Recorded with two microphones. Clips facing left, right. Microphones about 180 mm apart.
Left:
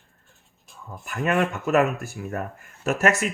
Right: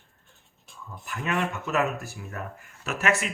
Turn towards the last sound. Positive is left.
turn(degrees=45)  # may be behind; listen again after turning